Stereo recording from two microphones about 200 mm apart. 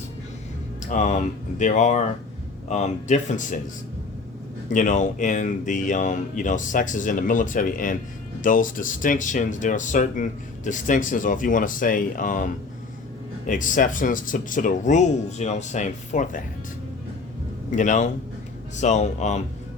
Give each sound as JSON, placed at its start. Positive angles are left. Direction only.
{"t": 0.9, "sound": "speech", "side_deg": 40}
{"t": 4.7, "sound": "speech", "side_deg": 40}
{"t": 13.5, "sound": "speech", "side_deg": 40}
{"t": 17.7, "sound": "speech", "side_deg": 40}